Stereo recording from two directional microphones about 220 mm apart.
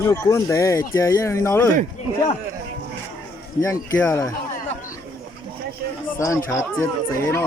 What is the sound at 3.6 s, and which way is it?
Speech, 15° left (ahead or behind).